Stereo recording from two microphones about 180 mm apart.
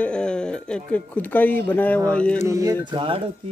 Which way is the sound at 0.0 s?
5° left (ahead or behind).